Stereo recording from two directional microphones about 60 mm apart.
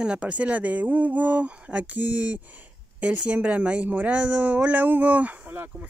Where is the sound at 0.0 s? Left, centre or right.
Centre.